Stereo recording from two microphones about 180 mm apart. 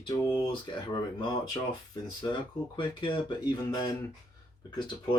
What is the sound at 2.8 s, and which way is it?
Speech, 25° left (ahead or behind).